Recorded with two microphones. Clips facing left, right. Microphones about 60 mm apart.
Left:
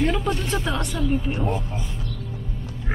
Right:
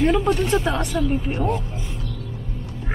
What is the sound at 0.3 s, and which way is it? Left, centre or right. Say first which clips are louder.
Speech: right 6 dB; right.